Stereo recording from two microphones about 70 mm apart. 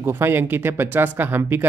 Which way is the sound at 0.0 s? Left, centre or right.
Right.